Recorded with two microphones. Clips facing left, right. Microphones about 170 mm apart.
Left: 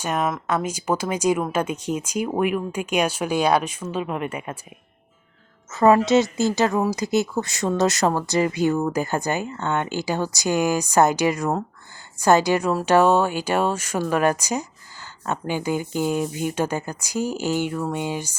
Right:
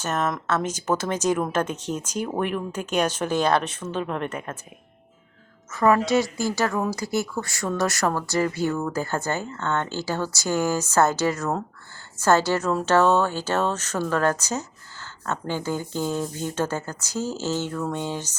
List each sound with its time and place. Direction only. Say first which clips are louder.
0.0 s speech: left 2 dB; 10° left (ahead or behind)
5.7 s speech: left 4 dB; 25° left (ahead or behind)